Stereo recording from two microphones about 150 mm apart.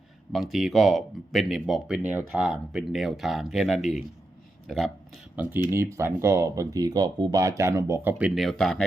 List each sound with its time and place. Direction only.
0.3 s speech: centre (ahead or behind)
5.7 s speech: 15° right (ahead or behind)
8.4 s speech: 5° left (ahead or behind)